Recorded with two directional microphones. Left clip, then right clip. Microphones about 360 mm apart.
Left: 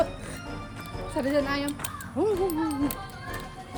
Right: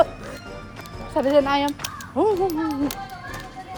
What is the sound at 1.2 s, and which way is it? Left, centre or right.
A child's voice, centre.